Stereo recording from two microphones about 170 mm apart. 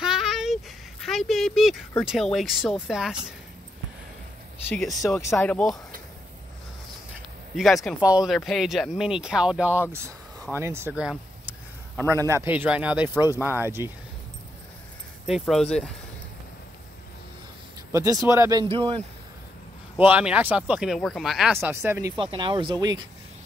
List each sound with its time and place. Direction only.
0.0 s a sound: 5° right (ahead or behind)
1.0 s speech: centre (ahead or behind)
5.1 s speech: 5° left (ahead or behind)
7.5 s speech: centre (ahead or behind)
12.1 s speech: 15° right (ahead or behind)
15.2 s speech: centre (ahead or behind)
17.9 s speech: 20° right (ahead or behind)
18.7 s speech: 35° right (ahead or behind)
20.0 s speech: 10° right (ahead or behind)
21.5 s speech: 15° right (ahead or behind)
22.1 s speech: 30° right (ahead or behind)